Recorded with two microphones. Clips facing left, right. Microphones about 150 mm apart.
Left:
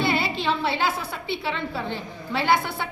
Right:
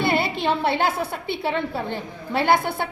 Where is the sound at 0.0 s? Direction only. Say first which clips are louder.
Right 2 dB; 55° right (ahead or behind).